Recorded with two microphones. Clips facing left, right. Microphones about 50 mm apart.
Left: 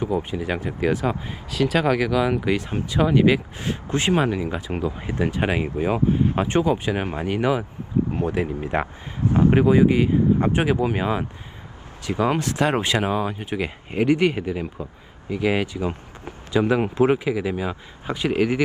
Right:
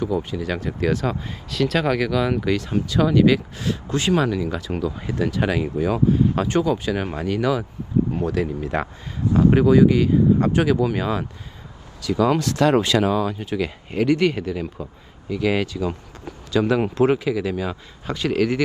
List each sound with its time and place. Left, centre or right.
0.0 s speech: left
15.8 s speech: left
16.5 s speech: centre